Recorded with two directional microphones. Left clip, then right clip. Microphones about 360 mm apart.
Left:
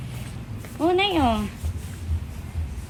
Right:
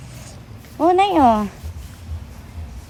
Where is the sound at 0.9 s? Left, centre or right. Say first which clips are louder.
Right 7 dB; right.